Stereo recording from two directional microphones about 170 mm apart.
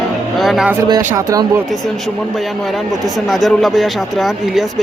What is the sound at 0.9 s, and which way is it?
Speech, 20° right (ahead or behind).